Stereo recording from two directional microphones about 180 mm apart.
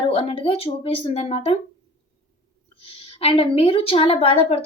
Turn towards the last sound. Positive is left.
turn(degrees=30)  # may be behind; listen again after turning